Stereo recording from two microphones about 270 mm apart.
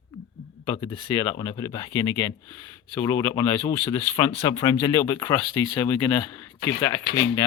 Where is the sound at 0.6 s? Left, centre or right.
Centre.